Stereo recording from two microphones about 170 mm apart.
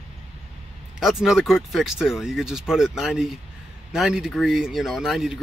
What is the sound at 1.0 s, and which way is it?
Speech, 5° right (ahead or behind).